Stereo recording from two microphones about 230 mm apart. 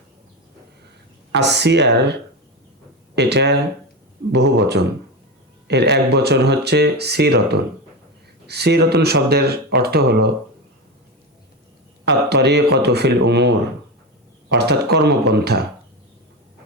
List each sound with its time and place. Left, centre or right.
1.3 s speech: right
3.2 s speech: right
12.0 s speech: right
14.5 s speech: right